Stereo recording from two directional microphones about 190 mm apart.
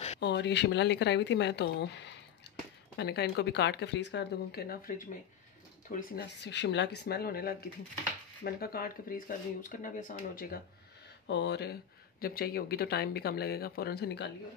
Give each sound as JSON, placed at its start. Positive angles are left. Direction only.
{"t": 0.2, "sound": "speech", "side_deg": 65}
{"t": 2.4, "sound": "a sound", "side_deg": 65}
{"t": 3.0, "sound": "speech", "side_deg": 60}
{"t": 11.2, "sound": "speech", "side_deg": 65}